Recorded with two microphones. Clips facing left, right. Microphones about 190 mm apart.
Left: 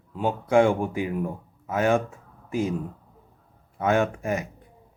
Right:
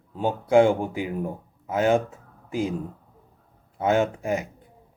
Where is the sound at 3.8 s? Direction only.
20° right (ahead or behind).